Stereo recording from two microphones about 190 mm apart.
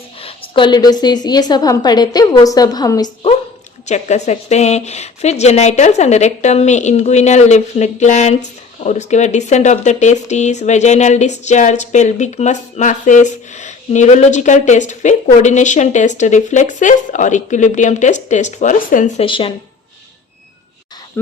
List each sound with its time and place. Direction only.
0.2 s a woman's voice: 30° left (ahead or behind)
3.8 s a woman's voice: 35° left (ahead or behind)